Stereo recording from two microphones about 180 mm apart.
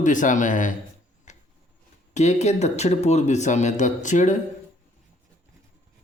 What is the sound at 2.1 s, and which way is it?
Speech, 40° left (ahead or behind).